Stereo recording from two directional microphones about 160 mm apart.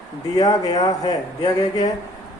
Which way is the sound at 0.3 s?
25° left (ahead or behind).